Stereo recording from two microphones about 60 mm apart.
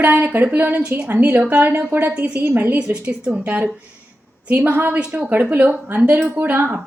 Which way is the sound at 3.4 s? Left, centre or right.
Right.